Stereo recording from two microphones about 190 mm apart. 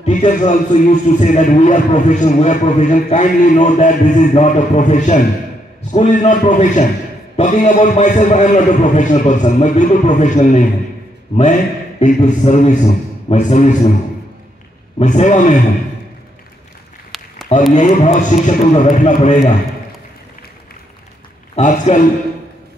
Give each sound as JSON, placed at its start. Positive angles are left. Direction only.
{"t": 0.0, "sound": "a man's voice", "side_deg": 40}
{"t": 12.0, "sound": "a man's voice", "side_deg": 40}
{"t": 15.0, "sound": "a man's voice", "side_deg": 40}
{"t": 17.1, "sound": "a sound", "side_deg": 0}
{"t": 17.7, "sound": "a man's voice", "side_deg": 40}
{"t": 21.5, "sound": "a man's voice", "side_deg": 40}